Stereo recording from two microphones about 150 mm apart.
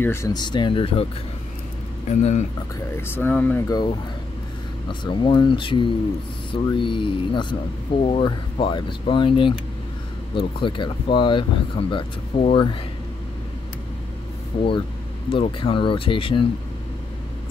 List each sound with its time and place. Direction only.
0.0 s speech: 20° left (ahead or behind); by 1.0 s 35° left (ahead or behind)
2.0 s speech: 50° left (ahead or behind)
3.0 s speech: 15° left (ahead or behind)
3.6 s speech: 25° left (ahead or behind)
5.0 s speech: 30° left (ahead or behind)
14.5 s speech: 35° left (ahead or behind)